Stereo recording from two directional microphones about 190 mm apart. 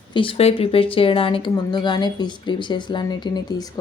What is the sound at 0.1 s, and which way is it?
Speech, 25° left (ahead or behind).